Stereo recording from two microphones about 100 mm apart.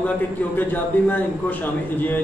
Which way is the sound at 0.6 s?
15° left (ahead or behind).